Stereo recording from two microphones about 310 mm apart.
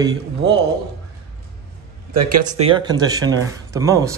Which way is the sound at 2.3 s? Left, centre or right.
Right.